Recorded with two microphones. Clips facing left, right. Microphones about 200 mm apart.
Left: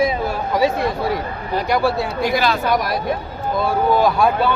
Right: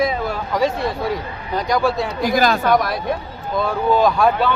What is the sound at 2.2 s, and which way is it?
Speech, 45° right (ahead or behind).